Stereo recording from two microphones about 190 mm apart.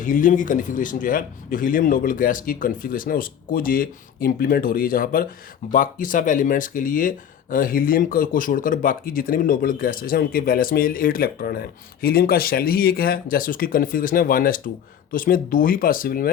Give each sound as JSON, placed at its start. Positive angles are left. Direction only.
{"t": 0.0, "sound": "speech", "side_deg": 45}